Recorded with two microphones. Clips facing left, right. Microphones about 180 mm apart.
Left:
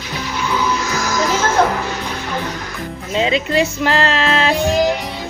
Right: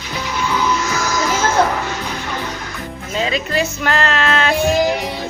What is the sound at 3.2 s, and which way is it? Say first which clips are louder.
Speech: left 3 dB; 25° left (ahead or behind).